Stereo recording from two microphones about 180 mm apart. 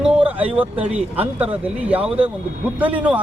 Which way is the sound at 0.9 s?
35° right (ahead or behind).